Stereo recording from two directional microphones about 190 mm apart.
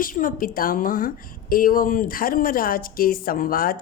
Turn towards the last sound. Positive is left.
turn(degrees=50)  # may be behind; listen again after turning